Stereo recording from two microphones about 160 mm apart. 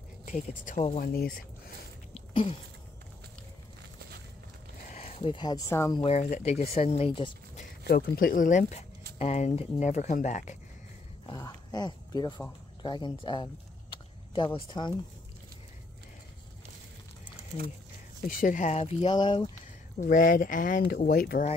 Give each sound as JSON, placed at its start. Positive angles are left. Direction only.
{"t": 0.2, "sound": "speech", "side_deg": 50}
{"t": 0.9, "sound": "speech", "side_deg": 65}
{"t": 2.1, "sound": "a sound", "side_deg": 40}
{"t": 5.0, "sound": "speech", "side_deg": 35}
{"t": 5.9, "sound": "speech", "side_deg": 40}
{"t": 7.8, "sound": "speech", "side_deg": 70}
{"t": 11.2, "sound": "speech", "side_deg": 25}
{"t": 18.3, "sound": "speech", "side_deg": 55}
{"t": 20.0, "sound": "speech", "side_deg": 60}